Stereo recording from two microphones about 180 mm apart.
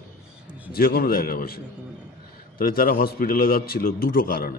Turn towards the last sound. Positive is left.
turn(degrees=55)  # may be behind; listen again after turning